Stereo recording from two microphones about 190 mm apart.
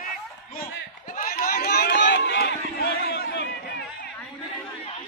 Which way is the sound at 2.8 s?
55° left (ahead or behind).